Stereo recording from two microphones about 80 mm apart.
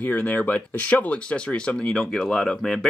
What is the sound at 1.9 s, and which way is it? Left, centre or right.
Speech, centre.